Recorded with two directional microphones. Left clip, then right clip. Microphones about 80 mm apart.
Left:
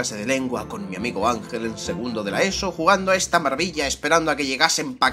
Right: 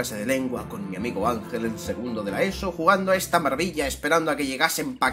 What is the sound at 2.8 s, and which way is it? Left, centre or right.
Speech, centre.